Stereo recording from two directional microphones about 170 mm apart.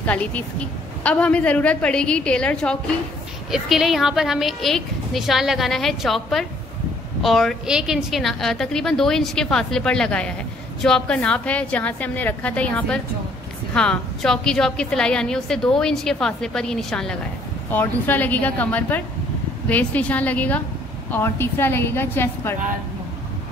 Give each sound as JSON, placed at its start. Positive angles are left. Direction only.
{"t": 0.0, "sound": "a woman's voice", "side_deg": 10}